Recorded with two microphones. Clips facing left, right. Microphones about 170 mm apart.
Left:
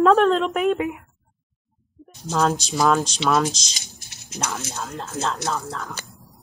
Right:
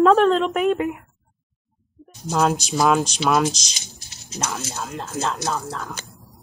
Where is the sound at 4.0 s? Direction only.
55° left (ahead or behind).